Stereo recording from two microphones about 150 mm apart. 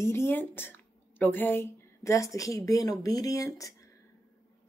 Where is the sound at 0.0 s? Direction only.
15° left (ahead or behind).